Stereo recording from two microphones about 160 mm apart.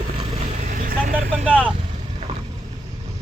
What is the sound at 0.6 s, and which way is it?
Vehicle, 55° right (ahead or behind).